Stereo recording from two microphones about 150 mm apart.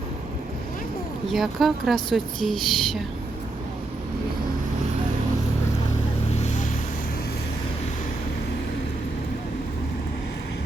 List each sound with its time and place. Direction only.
1.3 s speech: centre (ahead or behind)
6.4 s vehicle: 55° left (ahead or behind)